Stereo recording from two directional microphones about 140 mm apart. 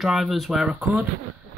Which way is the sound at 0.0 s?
Centre (ahead or behind).